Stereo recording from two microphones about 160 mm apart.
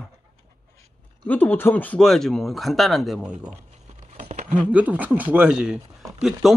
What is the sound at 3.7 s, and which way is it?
Crumpling, 45° right (ahead or behind).